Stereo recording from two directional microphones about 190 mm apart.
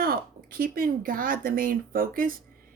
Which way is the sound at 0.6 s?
50° right (ahead or behind).